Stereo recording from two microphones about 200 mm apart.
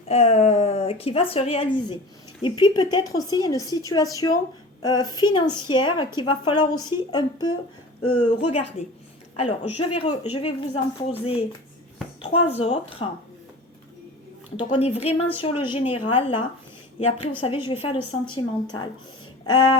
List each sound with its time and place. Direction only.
0.1 s a woman's voice: 30° left (ahead or behind)
8.0 s a woman's voice: 90° left
9.3 s speech: 30° left (ahead or behind)
14.6 s a woman's voice: 25° left (ahead or behind)
19.5 s a woman's voice: 90° left